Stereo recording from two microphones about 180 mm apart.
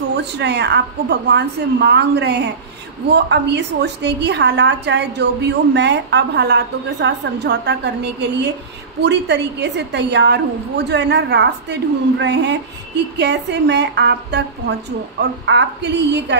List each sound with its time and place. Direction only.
0.2 s a woman's voice: 70° right (ahead or behind)